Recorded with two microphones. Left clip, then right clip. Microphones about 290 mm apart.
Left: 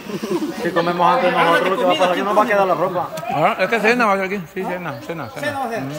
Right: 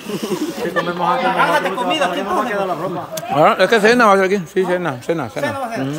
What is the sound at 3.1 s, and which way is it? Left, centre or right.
Speech, centre.